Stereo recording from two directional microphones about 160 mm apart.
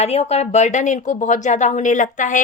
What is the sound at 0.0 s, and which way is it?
Speech, 40° left (ahead or behind).